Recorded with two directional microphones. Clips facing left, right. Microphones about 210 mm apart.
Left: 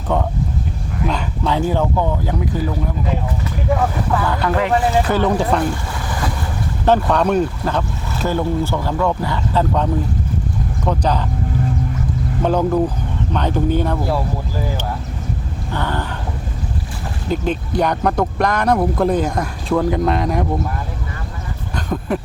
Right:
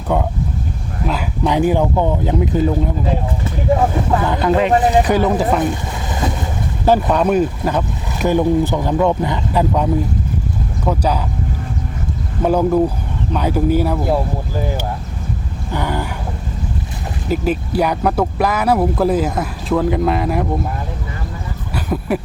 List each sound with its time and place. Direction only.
0.1 s speech: 10° right (ahead or behind)
1.5 s speech: 15° right (ahead or behind)
5.4 s speech: 5° right (ahead or behind)
5.6 s boat: 20° right (ahead or behind)
6.8 s speech: 10° right (ahead or behind)
12.4 s speech: 10° right (ahead or behind)
15.7 s a sound: 10° right (ahead or behind)
17.2 s speech: 5° right (ahead or behind)
21.8 s dog: 10° right (ahead or behind)